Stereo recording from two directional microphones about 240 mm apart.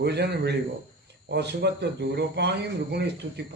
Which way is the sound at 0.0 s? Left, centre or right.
Right.